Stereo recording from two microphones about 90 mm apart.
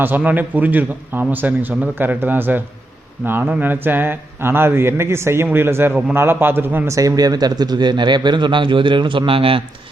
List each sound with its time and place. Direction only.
0.2 s speech: 20° right (ahead or behind)
6.8 s speech: 35° right (ahead or behind); by 9.6 s 90° right